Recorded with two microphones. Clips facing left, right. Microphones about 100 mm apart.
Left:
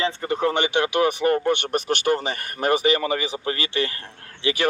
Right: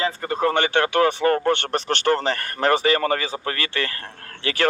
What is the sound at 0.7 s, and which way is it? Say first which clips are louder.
Speech: right 2 dB; 15° left (ahead or behind).